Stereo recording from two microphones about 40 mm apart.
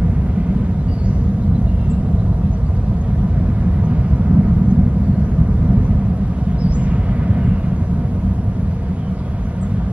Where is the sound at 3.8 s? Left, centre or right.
Right.